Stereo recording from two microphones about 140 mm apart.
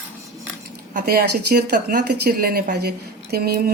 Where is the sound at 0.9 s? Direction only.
90° right.